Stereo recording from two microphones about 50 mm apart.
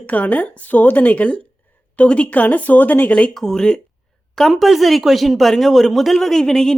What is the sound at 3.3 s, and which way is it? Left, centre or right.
Speech, centre.